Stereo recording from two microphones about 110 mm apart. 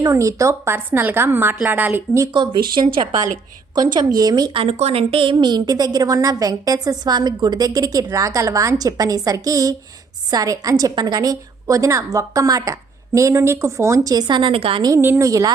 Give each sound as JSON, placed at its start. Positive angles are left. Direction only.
{"t": 0.0, "sound": "a woman's voice", "side_deg": -30}
{"t": 2.3, "sound": "a woman's voice", "side_deg": -45}
{"t": 4.5, "sound": "a woman's voice", "side_deg": -65}
{"t": 14.8, "sound": "a woman's voice", "side_deg": -25}